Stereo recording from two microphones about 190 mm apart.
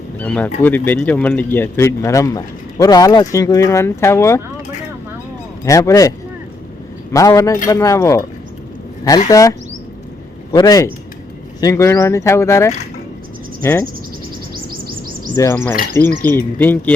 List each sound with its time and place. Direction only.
0.2 s speech: 10° left (ahead or behind)
5.6 s speech: 15° left (ahead or behind)
9.3 s speech: 15° left (ahead or behind)
13.6 s cricket: 15° left (ahead or behind)
14.5 s chirp: 50° right (ahead or behind)
15.4 s speech: 15° left (ahead or behind)